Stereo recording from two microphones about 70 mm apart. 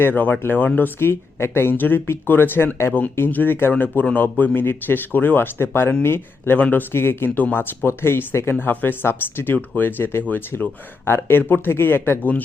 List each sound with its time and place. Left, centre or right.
0.0 s speech: left
0.9 s speech: left